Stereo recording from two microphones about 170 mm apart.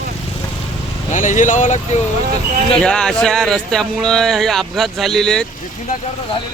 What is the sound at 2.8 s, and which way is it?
Speech, 5° left (ahead or behind).